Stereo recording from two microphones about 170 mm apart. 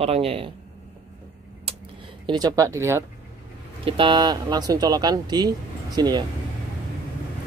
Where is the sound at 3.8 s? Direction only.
30° right (ahead or behind).